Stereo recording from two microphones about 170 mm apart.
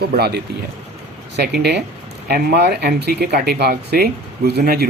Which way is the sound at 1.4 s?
75° right (ahead or behind).